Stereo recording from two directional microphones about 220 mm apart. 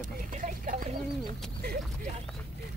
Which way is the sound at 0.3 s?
35° right (ahead or behind).